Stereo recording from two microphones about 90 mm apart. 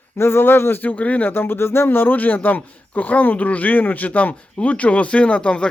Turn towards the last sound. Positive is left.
turn(degrees=10)  # may be behind; listen again after turning